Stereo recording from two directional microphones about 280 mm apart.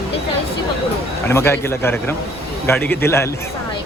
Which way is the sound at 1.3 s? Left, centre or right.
Centre.